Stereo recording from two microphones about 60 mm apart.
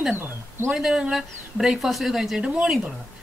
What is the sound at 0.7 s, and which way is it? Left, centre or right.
A woman's voice, centre.